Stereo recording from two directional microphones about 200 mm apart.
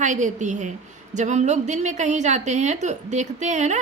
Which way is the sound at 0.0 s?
40° right (ahead or behind).